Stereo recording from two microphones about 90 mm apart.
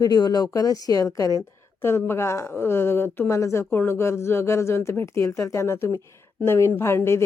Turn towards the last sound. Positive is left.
turn(degrees=30)  # may be behind; listen again after turning